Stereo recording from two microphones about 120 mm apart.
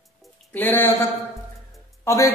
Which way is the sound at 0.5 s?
15° left (ahead or behind).